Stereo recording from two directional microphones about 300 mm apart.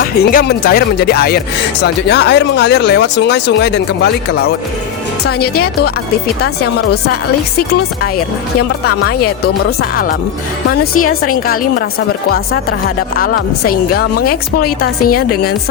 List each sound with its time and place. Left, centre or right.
0.0 s speech: left
5.4 s speech: left
6.9 s speech: left
9.4 s a woman's voice: left